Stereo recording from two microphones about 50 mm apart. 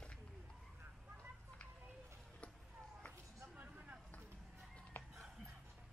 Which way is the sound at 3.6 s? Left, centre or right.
Right.